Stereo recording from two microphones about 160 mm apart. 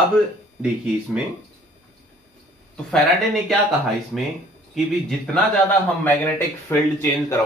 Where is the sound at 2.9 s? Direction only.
5° left (ahead or behind).